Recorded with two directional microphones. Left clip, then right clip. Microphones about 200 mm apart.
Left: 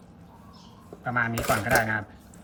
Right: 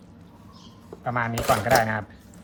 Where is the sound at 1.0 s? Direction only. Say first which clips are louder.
Right 2 dB; 30° right (ahead or behind).